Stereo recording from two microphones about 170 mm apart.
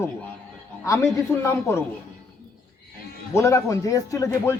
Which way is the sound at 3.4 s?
20° left (ahead or behind).